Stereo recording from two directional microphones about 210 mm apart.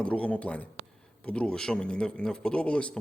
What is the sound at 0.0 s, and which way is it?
Speech, 5° left (ahead or behind).